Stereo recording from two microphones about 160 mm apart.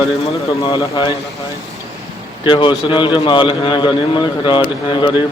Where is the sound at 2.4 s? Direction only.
30° left (ahead or behind).